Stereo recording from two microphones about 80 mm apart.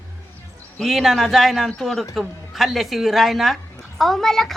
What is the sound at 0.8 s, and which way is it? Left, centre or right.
Speech, centre.